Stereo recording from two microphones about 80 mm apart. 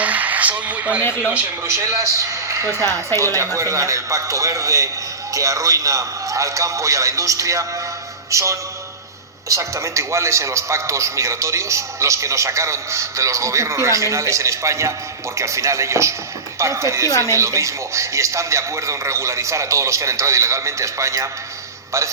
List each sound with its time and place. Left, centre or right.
0.0 s speech: centre
1.6 s a man's voice: right